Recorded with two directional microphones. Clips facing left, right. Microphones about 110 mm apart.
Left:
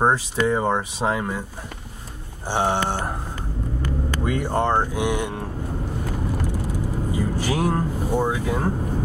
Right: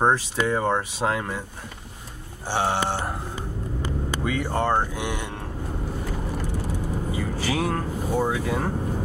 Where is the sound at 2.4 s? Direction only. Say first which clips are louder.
Left 2 dB; 15° left (ahead or behind).